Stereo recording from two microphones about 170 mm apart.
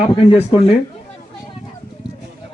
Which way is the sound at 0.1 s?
30° left (ahead or behind).